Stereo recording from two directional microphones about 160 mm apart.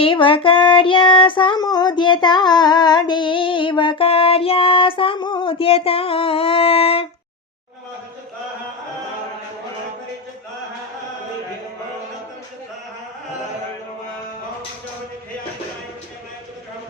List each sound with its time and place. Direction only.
0.0 s child singing: 35° left (ahead or behind)